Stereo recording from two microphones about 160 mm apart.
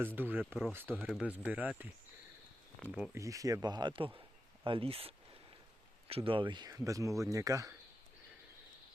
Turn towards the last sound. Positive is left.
turn(degrees=-20)  # may be behind; listen again after turning